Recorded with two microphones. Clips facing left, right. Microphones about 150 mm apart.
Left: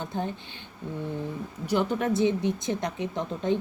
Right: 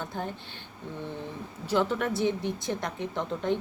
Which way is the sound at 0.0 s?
20° left (ahead or behind).